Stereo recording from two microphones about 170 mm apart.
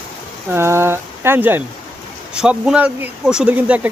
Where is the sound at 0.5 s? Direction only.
15° right (ahead or behind).